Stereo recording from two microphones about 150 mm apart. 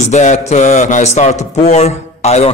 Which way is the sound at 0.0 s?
55° left (ahead or behind).